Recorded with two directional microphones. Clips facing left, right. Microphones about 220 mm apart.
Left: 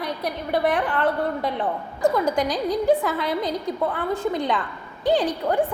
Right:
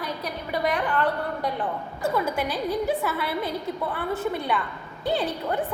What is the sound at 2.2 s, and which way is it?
Speech, 15° left (ahead or behind).